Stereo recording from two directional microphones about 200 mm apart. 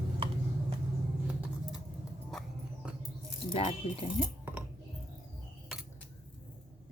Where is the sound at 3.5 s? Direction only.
30° left (ahead or behind).